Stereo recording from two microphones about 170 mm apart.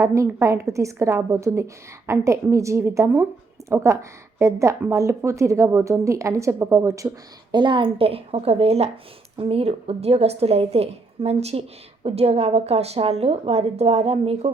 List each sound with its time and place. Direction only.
0.0 s a woman's voice: 15° right (ahead or behind); by 14.5 s 35° right (ahead or behind)